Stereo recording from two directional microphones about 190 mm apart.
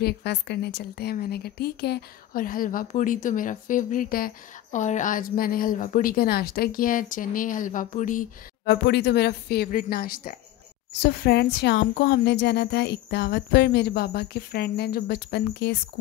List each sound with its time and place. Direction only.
0.0 s a woman's voice: 60° left (ahead or behind); by 8.3 s 40° left (ahead or behind)
8.6 s a woman's voice: 60° left (ahead or behind)